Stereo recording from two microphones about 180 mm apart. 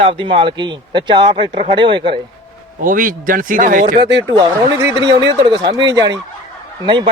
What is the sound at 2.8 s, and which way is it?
Speech, 50° right (ahead or behind).